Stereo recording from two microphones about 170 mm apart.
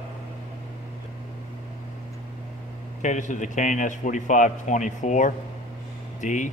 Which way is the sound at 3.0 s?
45° left (ahead or behind).